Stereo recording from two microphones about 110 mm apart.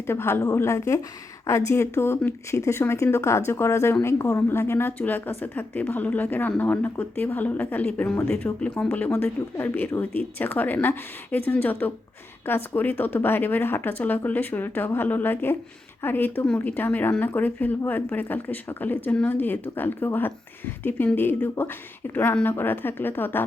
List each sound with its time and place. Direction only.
0.1 s a woman's voice: 20° left (ahead or behind)